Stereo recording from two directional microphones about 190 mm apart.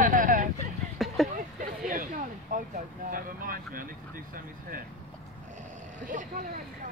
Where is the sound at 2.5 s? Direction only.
45° right (ahead or behind).